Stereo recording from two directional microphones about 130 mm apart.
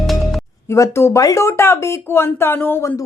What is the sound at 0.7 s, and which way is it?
Speech, 20° left (ahead or behind).